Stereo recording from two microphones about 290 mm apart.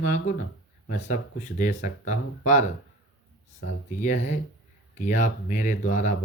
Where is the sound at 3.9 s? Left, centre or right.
Left.